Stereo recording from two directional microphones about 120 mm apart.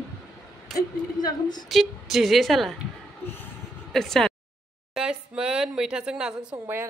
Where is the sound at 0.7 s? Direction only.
35° left (ahead or behind).